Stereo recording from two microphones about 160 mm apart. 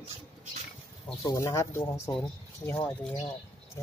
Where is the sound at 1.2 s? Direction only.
20° left (ahead or behind).